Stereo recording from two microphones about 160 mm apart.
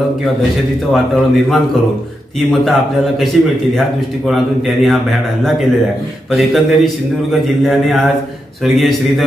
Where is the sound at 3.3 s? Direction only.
Centre (ahead or behind).